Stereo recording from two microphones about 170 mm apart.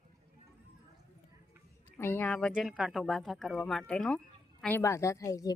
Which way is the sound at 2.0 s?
15° left (ahead or behind).